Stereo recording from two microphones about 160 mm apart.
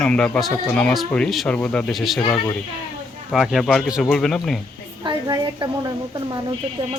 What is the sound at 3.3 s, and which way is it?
Speech, centre (ahead or behind).